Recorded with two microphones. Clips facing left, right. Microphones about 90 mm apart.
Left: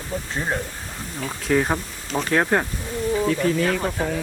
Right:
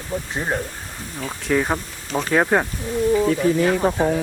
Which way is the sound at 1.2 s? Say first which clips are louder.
Even; centre (ahead or behind).